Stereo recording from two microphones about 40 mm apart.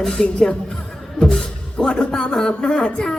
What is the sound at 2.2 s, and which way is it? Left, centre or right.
Speech, left.